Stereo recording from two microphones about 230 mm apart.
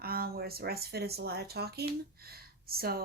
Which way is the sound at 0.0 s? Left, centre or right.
Right.